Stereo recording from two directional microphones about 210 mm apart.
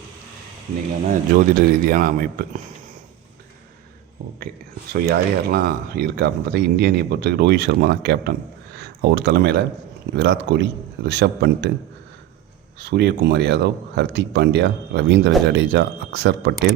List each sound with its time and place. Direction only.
1.0 s speech: 40° right (ahead or behind)
4.9 s speech: 45° right (ahead or behind)
12.8 s speech: 55° right (ahead or behind)